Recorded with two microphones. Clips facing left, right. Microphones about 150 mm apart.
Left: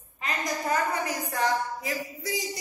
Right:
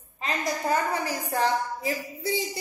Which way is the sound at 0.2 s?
30° right (ahead or behind).